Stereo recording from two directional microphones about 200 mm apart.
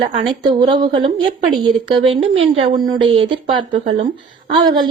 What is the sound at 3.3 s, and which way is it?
A woman's voice, 25° right (ahead or behind).